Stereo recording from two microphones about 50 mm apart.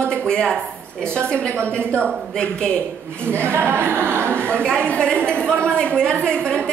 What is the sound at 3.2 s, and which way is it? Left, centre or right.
A man's voice, right.